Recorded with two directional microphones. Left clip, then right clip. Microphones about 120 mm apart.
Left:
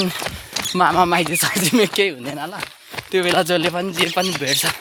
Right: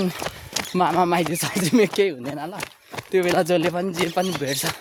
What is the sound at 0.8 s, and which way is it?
Speech, 5° left (ahead or behind).